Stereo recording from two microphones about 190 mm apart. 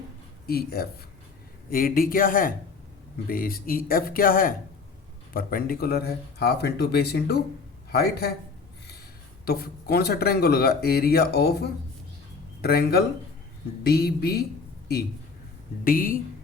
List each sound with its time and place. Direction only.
0.4 s a man's voice: 55° left (ahead or behind)
9.5 s speech: 55° left (ahead or behind)
15.8 s speech: 50° left (ahead or behind)